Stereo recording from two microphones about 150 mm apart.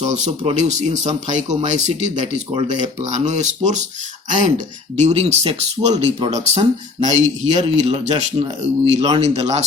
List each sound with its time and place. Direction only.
0.0 s speech: 50° right (ahead or behind)